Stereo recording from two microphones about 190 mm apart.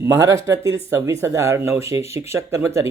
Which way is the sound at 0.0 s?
15° right (ahead or behind).